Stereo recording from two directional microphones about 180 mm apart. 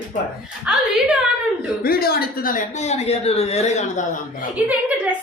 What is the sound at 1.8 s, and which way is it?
A woman's voice, 60° left (ahead or behind).